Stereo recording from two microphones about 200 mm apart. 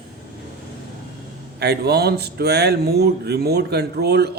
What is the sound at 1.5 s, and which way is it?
Speech, 55° right (ahead or behind).